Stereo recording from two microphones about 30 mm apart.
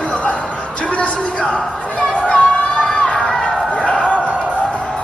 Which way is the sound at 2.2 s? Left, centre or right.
Left.